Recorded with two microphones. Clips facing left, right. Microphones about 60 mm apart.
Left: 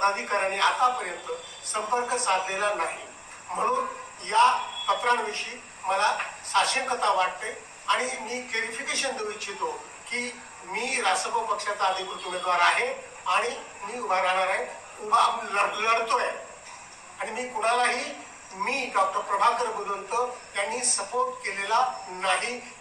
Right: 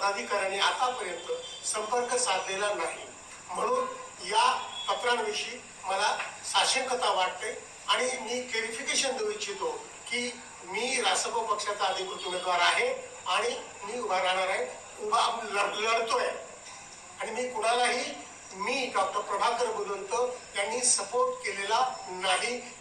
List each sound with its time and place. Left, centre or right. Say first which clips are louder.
0.0 s a man's voice: left 4 dB; left